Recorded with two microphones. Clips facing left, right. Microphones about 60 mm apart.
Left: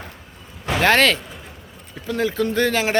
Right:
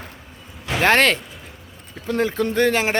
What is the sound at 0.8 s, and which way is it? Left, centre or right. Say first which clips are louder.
Speech: even; right.